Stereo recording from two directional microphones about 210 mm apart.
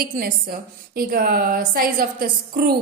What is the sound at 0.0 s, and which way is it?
Speech, 45° right (ahead or behind).